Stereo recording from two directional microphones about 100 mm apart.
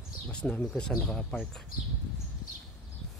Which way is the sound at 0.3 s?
10° left (ahead or behind).